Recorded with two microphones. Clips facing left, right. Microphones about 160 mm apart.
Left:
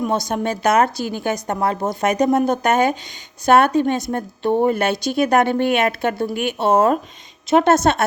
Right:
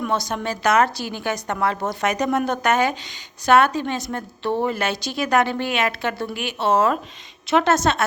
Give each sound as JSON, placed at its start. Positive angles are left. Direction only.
{"t": 0.0, "sound": "a woman's voice", "side_deg": 50}